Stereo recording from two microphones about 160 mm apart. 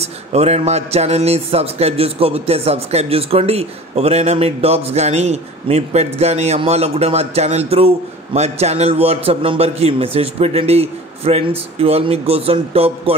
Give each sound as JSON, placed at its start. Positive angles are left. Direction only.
{"t": 0.0, "sound": "a man's voice", "side_deg": -40}